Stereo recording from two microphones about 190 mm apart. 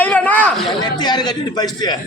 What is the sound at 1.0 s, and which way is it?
Speech, 20° left (ahead or behind).